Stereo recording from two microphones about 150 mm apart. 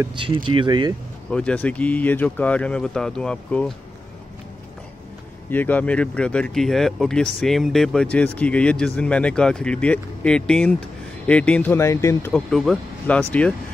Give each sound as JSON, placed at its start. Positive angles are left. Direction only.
{"t": 0.2, "sound": "speech", "side_deg": -35}
{"t": 1.3, "sound": "speech", "side_deg": 10}
{"t": 5.5, "sound": "speech", "side_deg": 10}